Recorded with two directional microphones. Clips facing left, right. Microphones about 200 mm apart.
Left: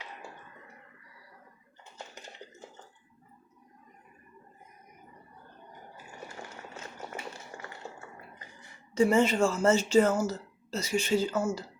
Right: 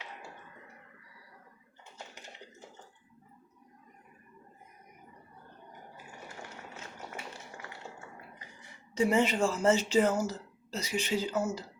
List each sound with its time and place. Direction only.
9.0 s speech: 15° right (ahead or behind)